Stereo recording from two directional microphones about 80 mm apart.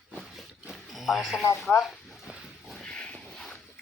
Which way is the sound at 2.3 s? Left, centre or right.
Centre.